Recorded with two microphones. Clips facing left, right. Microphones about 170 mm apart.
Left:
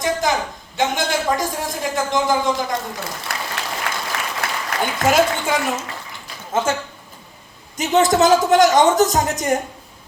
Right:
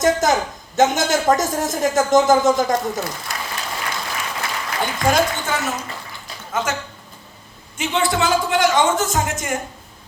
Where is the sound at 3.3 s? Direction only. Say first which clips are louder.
Left 1 dB; 65° left (ahead or behind).